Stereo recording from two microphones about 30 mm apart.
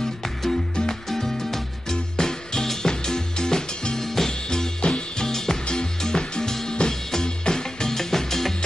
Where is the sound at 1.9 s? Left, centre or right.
Left.